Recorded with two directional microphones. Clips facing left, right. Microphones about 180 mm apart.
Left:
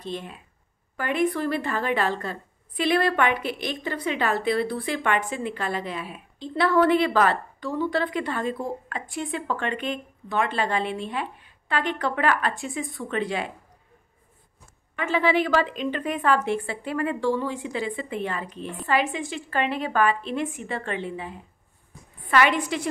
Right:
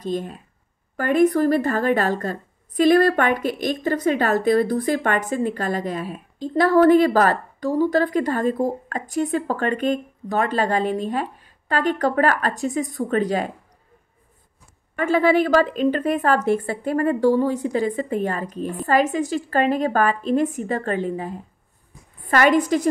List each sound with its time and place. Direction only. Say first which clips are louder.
0.0 s a woman's voice: right 7 dB; 40° right (ahead or behind)
15.0 s a woman's voice: right 5 dB; 45° right (ahead or behind)